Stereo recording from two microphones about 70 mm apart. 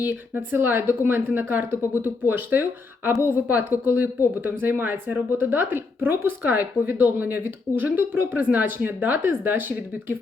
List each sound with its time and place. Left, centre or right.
0.0 s speech: right